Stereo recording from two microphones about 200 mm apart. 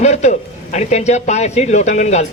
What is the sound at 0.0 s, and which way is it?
A man's voice, 35° left (ahead or behind).